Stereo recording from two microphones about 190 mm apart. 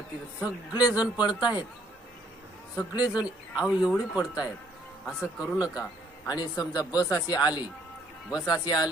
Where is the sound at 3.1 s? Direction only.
5° right (ahead or behind).